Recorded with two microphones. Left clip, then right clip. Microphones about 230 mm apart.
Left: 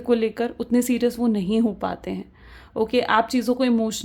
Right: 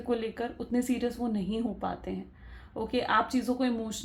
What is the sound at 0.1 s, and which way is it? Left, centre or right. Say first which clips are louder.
Speech: left 10 dB; left.